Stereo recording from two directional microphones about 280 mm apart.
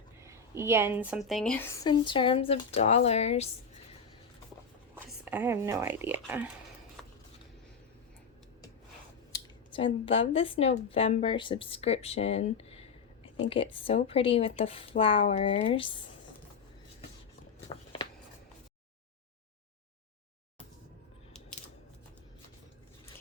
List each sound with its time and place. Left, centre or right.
0.2 s a woman's voice: centre; by 3.5 s left
4.9 s speech: centre
9.3 s speech: centre